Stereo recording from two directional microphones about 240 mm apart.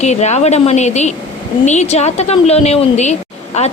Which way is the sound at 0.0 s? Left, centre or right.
Left.